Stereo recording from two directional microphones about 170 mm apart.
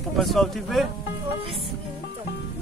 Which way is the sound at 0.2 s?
Centre (ahead or behind).